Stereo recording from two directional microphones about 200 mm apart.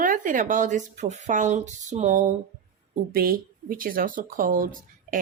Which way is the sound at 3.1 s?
50° right (ahead or behind).